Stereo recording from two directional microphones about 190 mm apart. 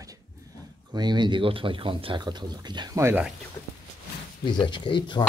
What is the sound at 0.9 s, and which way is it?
Speech, 20° right (ahead or behind).